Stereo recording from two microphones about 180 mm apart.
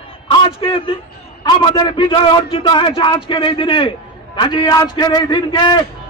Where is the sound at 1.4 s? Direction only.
25° left (ahead or behind).